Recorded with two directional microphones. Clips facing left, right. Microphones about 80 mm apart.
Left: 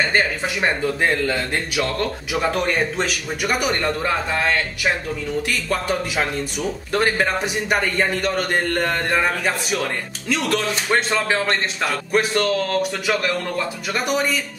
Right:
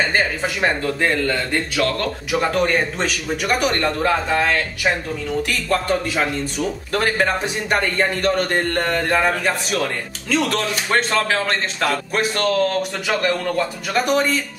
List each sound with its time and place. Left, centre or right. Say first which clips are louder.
1.0 s a man's voice: right 1 dB; centre
13.9 s a man's voice: right 4 dB; centre